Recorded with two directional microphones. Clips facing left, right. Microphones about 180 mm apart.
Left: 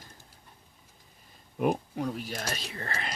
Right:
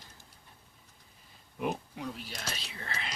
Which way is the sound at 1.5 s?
50° left (ahead or behind).